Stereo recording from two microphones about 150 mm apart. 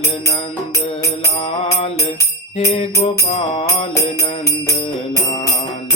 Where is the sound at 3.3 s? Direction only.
45° left (ahead or behind).